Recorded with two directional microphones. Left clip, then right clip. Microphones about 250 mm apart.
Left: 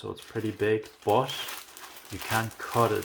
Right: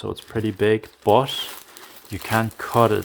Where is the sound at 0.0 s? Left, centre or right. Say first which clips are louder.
Right 7 dB; right.